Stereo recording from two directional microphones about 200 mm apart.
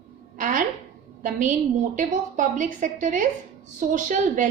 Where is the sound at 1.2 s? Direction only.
40° right (ahead or behind).